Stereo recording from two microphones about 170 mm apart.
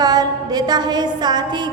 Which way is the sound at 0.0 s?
25° right (ahead or behind).